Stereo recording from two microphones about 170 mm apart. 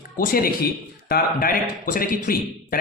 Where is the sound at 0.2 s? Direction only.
55° left (ahead or behind).